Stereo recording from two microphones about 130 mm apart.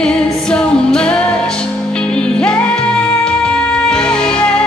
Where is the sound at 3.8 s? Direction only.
5° left (ahead or behind).